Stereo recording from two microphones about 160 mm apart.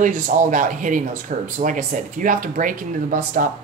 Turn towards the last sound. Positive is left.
turn(degrees=-55)  # may be behind; listen again after turning